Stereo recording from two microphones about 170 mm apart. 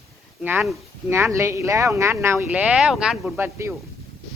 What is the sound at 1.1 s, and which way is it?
Speech, 15° right (ahead or behind).